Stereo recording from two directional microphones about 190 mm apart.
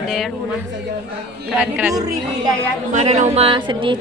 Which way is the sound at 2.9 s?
40° right (ahead or behind).